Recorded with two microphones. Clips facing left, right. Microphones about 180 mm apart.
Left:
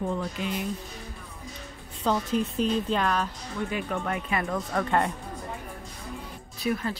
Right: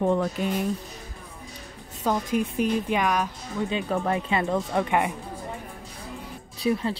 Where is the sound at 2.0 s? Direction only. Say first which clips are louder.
Right 1 dB; 10° right (ahead or behind).